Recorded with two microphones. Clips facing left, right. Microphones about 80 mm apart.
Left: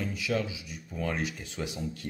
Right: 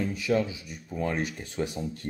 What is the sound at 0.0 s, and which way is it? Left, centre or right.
Speech, right.